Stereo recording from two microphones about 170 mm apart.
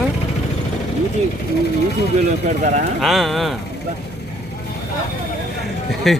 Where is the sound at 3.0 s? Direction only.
Centre (ahead or behind).